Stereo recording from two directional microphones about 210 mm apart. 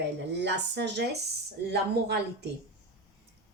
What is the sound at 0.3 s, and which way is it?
A woman's voice, 55° right (ahead or behind).